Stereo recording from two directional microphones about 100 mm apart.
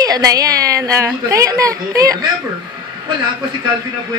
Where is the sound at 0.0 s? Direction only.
35° right (ahead or behind).